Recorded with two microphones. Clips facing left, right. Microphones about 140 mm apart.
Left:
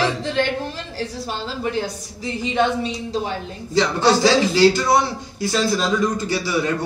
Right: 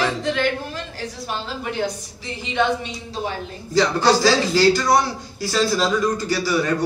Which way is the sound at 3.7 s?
20° left (ahead or behind).